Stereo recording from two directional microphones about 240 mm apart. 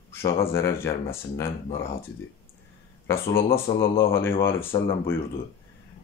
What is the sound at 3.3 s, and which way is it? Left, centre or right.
A man's voice, centre.